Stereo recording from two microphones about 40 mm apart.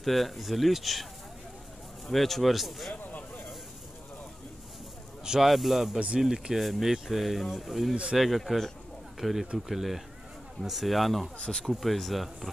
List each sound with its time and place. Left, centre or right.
0.0 s speech: centre
2.0 s speech: centre
2.9 s a sound: left
5.2 s speech: centre
5.5 s speech: centre
5.9 s speech: right
6.2 s speech: centre
6.6 s speech: centre
7.9 s speech: right
8.2 s speech: centre
11.3 s speech: left
11.7 s speech: centre